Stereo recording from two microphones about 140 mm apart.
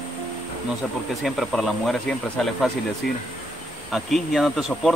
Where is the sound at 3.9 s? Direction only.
Centre (ahead or behind).